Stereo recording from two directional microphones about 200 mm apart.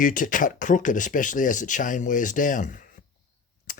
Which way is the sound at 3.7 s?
45° left (ahead or behind).